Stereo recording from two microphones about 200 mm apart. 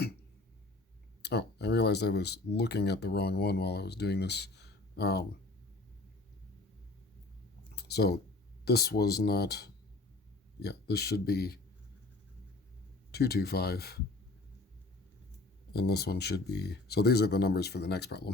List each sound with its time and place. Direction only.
1.2 s speech: 55° left (ahead or behind)
7.8 s speech: 55° left (ahead or behind)
13.1 s speech: 50° left (ahead or behind)
15.7 s speech: 55° left (ahead or behind)